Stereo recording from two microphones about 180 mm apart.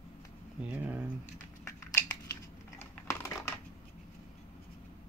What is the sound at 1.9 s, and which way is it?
Crushing, 20° left (ahead or behind).